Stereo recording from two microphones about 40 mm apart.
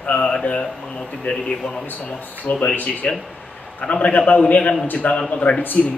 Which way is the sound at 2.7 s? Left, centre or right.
Left.